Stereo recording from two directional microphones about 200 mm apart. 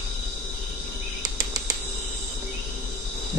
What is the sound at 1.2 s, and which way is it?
Cricket, 20° right (ahead or behind).